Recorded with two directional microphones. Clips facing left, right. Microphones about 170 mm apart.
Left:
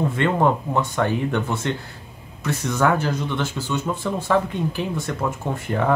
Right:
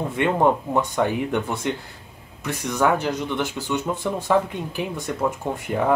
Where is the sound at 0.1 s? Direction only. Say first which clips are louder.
Even; 15° right (ahead or behind).